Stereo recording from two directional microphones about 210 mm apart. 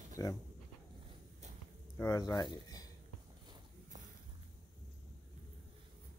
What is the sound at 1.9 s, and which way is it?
Speech, 15° left (ahead or behind).